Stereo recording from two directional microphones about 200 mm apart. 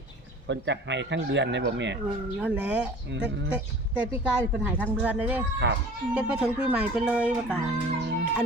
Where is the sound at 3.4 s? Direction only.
5° right (ahead or behind).